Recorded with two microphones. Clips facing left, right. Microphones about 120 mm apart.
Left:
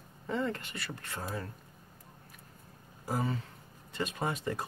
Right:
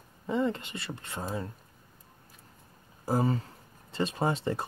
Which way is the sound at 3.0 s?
35° right (ahead or behind).